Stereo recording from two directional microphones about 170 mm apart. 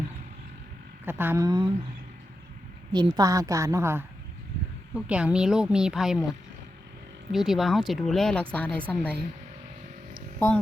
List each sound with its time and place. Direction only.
1.0 s speech: 10° right (ahead or behind)
2.9 s a woman's voice: 25° right (ahead or behind); by 6.2 s centre (ahead or behind)
7.3 s a woman's voice: centre (ahead or behind)